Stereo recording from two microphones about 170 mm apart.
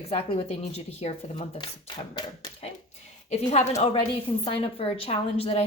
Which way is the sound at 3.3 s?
40° left (ahead or behind).